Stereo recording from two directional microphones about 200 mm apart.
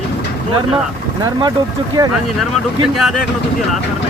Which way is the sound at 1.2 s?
20° right (ahead or behind).